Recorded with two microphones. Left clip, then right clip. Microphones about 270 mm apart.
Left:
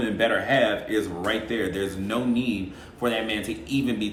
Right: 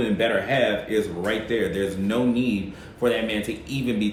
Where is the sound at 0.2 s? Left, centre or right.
Centre.